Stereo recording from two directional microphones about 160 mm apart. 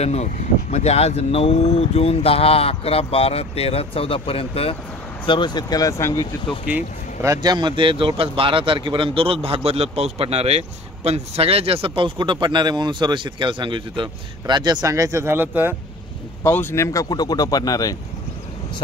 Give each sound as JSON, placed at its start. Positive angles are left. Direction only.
{"t": 0.0, "sound": "speech", "side_deg": 45}
{"t": 6.6, "sound": "speech", "side_deg": -10}
{"t": 7.2, "sound": "a man's voice", "side_deg": -25}
{"t": 16.4, "sound": "speech", "side_deg": 15}